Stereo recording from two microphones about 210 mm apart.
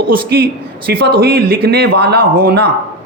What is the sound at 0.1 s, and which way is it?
A man's voice, 45° right (ahead or behind).